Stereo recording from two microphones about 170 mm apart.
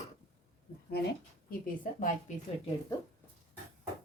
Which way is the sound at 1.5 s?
55° left (ahead or behind).